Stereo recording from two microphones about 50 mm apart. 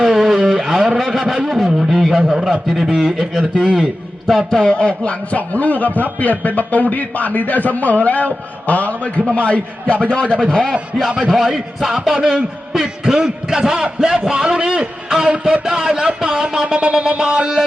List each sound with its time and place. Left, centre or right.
0.0 s a sound: centre
1.5 s a man's voice: centre
4.6 s a man's voice: centre